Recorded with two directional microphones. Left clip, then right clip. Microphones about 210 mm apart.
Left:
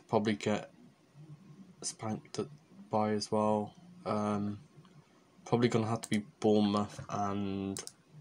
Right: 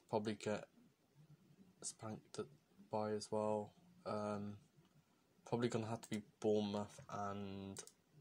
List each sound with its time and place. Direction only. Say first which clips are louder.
0.1 s speech: left 10 dB; 20° right (ahead or behind)
1.9 s speech: left 12 dB; 15° right (ahead or behind)
5.4 s speech: left 11 dB; 15° right (ahead or behind)